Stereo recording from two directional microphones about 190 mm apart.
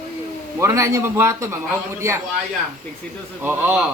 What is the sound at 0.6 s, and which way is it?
Speech, 15° right (ahead or behind).